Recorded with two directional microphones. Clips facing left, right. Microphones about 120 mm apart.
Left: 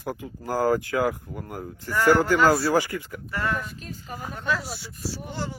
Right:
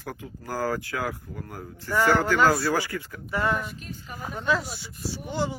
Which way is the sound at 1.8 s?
15° right (ahead or behind).